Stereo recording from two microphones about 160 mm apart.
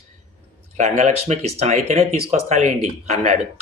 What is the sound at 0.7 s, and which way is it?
Speech, 50° right (ahead or behind).